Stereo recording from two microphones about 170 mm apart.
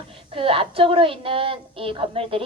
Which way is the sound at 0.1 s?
30° right (ahead or behind).